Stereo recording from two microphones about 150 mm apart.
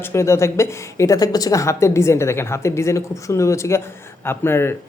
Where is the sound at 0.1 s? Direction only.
20° left (ahead or behind).